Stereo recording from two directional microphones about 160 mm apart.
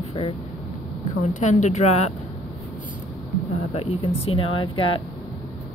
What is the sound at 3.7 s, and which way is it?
Speech, 40° left (ahead or behind).